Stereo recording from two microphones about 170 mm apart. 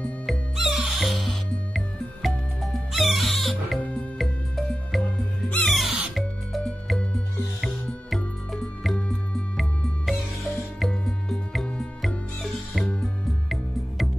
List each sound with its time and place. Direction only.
0.0 s music: centre (ahead or behind)
2.2 s music: centre (ahead or behind)